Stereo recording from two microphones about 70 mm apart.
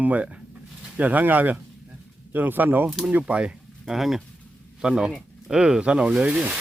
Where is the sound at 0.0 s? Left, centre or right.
Right.